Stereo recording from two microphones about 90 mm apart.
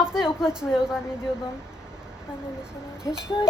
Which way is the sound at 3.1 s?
40° left (ahead or behind).